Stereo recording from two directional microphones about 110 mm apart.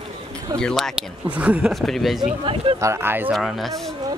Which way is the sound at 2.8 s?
25° right (ahead or behind).